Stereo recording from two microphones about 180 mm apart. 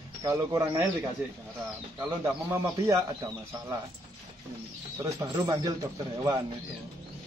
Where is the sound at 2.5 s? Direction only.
15° right (ahead or behind).